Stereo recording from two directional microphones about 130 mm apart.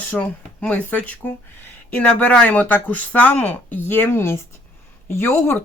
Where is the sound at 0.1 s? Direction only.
10° left (ahead or behind).